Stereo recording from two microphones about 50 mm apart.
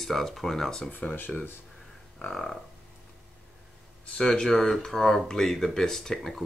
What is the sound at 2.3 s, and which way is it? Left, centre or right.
Speech, centre.